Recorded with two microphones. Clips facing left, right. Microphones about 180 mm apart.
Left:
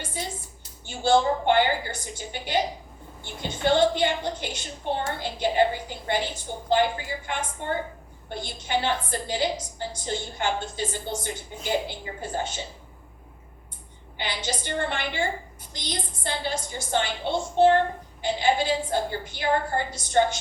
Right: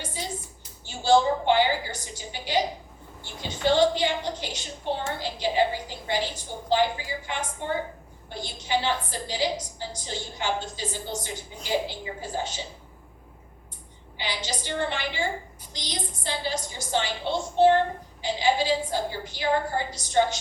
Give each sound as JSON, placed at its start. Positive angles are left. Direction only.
{"t": 0.0, "sound": "a sound", "side_deg": 55}
{"t": 3.4, "sound": "a woman's voice", "side_deg": 55}
{"t": 14.2, "sound": "a woman's voice", "side_deg": 55}